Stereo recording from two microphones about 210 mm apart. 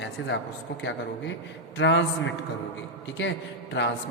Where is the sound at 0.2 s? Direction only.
70° left (ahead or behind).